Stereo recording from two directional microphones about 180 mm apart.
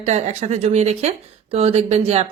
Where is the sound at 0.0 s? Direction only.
40° right (ahead or behind).